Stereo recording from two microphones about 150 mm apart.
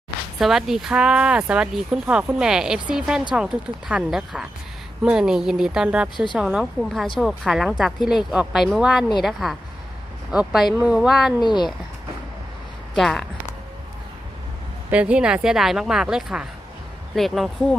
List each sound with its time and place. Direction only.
0.3 s speech: centre (ahead or behind)
11.3 s speech: 30° left (ahead or behind)
13.0 s speech: centre (ahead or behind)
14.8 s speech: 10° right (ahead or behind)